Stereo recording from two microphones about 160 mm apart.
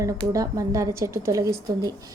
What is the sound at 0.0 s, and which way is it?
A woman's voice, 20° right (ahead or behind).